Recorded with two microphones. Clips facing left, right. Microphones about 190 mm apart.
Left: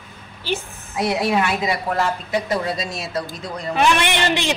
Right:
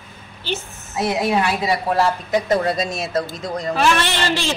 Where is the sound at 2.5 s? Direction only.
50° right (ahead or behind).